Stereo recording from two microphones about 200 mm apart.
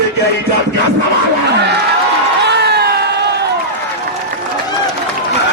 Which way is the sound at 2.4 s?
55° right (ahead or behind).